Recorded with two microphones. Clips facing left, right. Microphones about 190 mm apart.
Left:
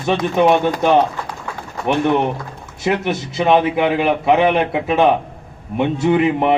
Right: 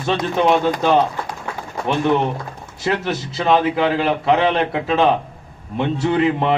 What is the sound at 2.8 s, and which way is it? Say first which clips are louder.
A man's voice: left 2 dB; 20° left (ahead or behind).